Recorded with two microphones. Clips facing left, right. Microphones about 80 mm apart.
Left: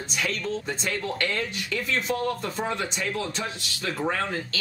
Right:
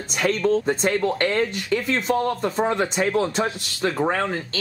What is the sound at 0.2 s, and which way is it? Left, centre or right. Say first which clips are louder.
Speech: right 10 dB; right.